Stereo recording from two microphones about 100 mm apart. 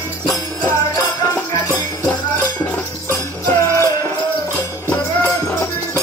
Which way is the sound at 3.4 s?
35° left (ahead or behind).